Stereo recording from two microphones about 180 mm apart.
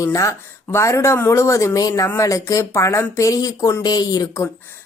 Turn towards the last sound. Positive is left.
turn(degrees=20)  # may be behind; listen again after turning